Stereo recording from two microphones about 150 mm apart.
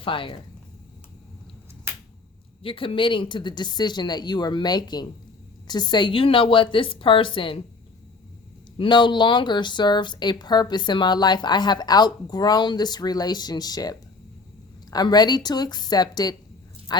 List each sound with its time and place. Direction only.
0.0 s a woman's voice: 35° left (ahead or behind)
2.6 s a woman's voice: 35° left (ahead or behind)
8.8 s speech: 30° left (ahead or behind)